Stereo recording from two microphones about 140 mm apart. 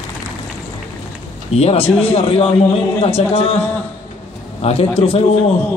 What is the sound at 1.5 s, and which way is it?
A man's voice, 45° left (ahead or behind).